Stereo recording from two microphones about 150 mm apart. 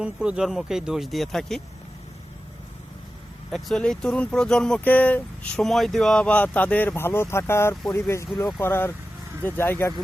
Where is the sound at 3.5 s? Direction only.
Centre (ahead or behind).